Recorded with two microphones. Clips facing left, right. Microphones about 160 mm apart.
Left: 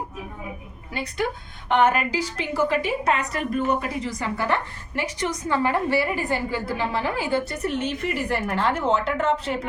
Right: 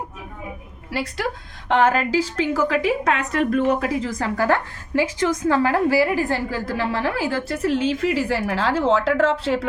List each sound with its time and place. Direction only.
1.7 s a woman's voice: 90° right